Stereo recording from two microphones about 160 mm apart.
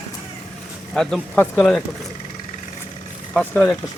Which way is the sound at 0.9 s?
5° left (ahead or behind).